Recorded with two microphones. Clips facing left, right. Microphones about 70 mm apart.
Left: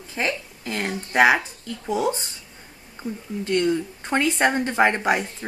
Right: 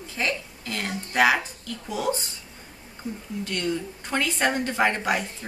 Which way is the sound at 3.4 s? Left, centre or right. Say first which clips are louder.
Left 7 dB; left.